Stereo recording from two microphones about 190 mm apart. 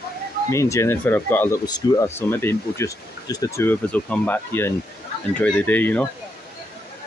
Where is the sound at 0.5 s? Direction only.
15° left (ahead or behind).